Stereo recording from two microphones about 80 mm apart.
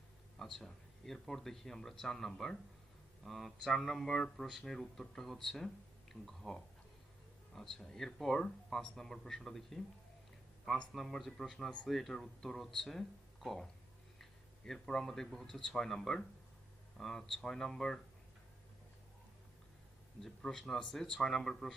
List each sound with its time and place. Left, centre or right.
0.3 s speech: centre
10.9 s speech: centre
20.2 s speech: centre